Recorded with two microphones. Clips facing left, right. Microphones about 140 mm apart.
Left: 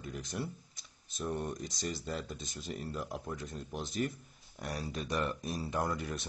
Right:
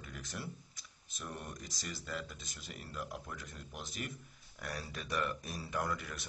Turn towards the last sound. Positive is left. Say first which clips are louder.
# left 4 dB
turn(degrees=30)  # may be behind; listen again after turning